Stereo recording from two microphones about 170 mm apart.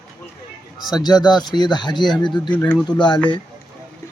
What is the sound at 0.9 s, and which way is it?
Speech, 25° left (ahead or behind).